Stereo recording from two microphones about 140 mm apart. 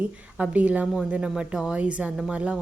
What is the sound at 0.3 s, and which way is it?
Speech, 10° right (ahead or behind).